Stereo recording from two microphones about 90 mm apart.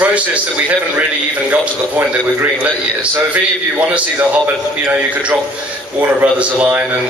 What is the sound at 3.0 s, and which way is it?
A man's voice, 15° right (ahead or behind).